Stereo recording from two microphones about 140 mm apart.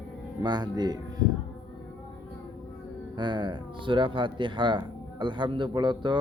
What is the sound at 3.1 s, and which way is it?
Speech, 35° right (ahead or behind).